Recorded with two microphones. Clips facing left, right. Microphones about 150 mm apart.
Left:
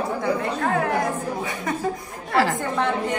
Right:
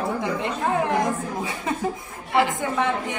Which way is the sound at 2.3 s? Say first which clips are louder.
Even; 20° right (ahead or behind).